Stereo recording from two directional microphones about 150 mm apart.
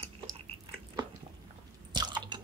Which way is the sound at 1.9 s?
30° right (ahead or behind).